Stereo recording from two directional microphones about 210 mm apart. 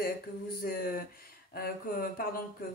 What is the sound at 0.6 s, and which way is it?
Speech, 45° left (ahead or behind).